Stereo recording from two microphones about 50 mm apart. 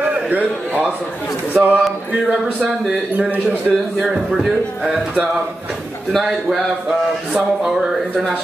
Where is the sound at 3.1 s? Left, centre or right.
Right.